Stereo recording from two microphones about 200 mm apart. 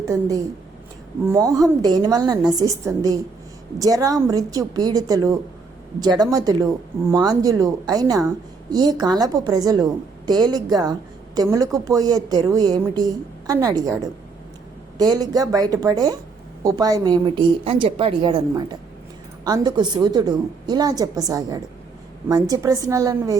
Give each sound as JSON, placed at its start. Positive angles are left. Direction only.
{"t": 0.0, "sound": "a woman's voice", "side_deg": -15}
{"t": 14.9, "sound": "a woman's voice", "side_deg": -20}